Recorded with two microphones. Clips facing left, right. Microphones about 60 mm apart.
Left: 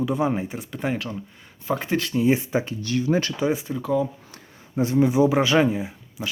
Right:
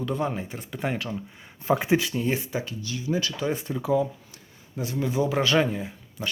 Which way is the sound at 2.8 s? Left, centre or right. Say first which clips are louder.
Left 5 dB; left.